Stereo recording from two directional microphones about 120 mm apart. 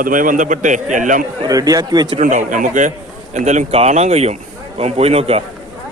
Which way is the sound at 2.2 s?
85° right.